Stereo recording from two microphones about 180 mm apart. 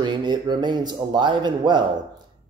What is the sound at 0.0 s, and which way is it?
A man's voice, 25° right (ahead or behind).